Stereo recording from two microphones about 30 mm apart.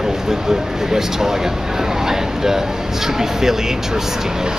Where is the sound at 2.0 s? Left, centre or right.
Centre.